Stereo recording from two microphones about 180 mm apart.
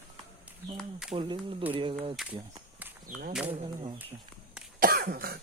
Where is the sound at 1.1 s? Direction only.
25° right (ahead or behind).